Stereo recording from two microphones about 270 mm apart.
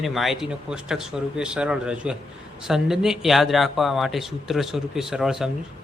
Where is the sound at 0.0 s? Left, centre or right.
Centre.